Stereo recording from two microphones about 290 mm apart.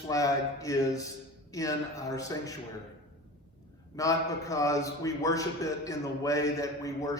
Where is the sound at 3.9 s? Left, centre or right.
Centre.